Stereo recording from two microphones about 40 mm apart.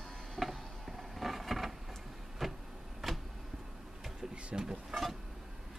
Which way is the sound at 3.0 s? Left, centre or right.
Centre.